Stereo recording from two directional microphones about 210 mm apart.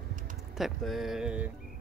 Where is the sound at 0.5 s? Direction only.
Centre (ahead or behind).